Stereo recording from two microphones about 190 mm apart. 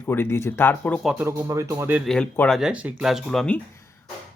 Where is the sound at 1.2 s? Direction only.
15° right (ahead or behind).